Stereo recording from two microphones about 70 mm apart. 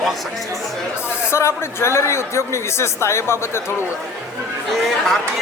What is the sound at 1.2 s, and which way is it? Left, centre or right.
A man's voice, left.